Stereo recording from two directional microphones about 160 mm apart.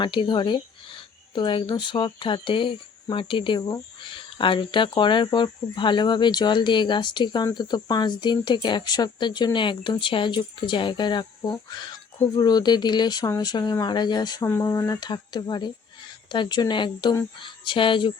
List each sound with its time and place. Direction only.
0.0 s speech: 30° left (ahead or behind)